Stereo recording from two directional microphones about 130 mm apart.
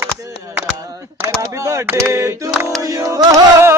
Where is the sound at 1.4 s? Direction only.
25° right (ahead or behind).